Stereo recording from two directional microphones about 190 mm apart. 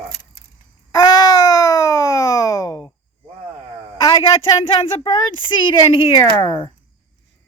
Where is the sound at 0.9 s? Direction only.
20° left (ahead or behind).